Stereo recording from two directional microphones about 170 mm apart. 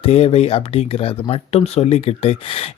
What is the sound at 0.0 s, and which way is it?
Speech, 35° left (ahead or behind).